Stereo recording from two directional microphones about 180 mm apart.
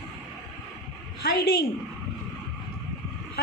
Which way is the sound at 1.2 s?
65° left (ahead or behind).